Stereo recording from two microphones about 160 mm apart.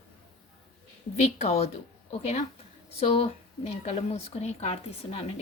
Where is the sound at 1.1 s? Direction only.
45° left (ahead or behind).